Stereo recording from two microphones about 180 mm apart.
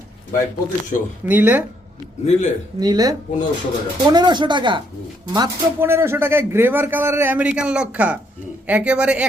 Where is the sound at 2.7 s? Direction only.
20° right (ahead or behind).